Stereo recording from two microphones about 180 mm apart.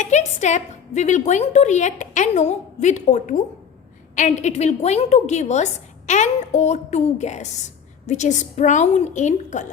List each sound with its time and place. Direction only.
0.0 s a woman's voice: 40° left (ahead or behind)